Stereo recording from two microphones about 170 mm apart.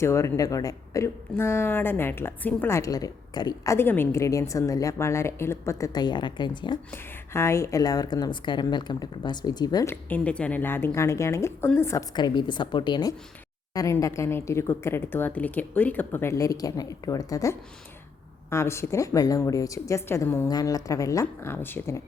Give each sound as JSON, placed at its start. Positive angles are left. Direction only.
{"t": 0.0, "sound": "speech", "side_deg": 15}
{"t": 6.9, "sound": "a woman's voice", "side_deg": 15}